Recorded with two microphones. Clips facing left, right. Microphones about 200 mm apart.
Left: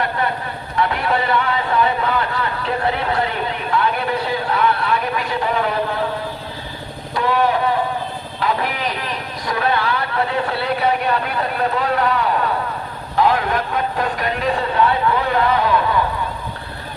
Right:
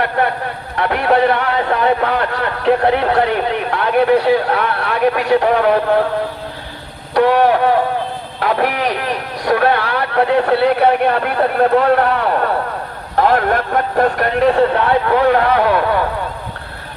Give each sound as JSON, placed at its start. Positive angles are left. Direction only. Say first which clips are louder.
{"t": 0.2, "sound": "a man's voice", "louder": "right 5 dB", "side_deg": -65}
{"t": 7.2, "sound": "a man's voice", "louder": "right 6 dB", "side_deg": -65}